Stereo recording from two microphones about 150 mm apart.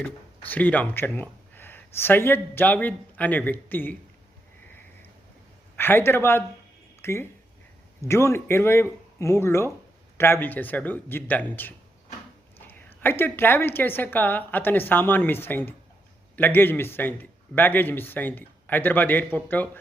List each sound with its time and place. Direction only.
0.0 s speech: 10° left (ahead or behind)
5.7 s a man's voice: 15° left (ahead or behind)
12.5 s a man's voice: 15° left (ahead or behind)